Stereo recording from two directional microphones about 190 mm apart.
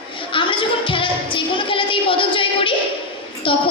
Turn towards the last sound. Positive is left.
turn(degrees=25)  # may be behind; listen again after turning